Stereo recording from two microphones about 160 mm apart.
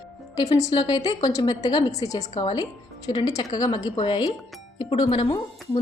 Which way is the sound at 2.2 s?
40° left (ahead or behind).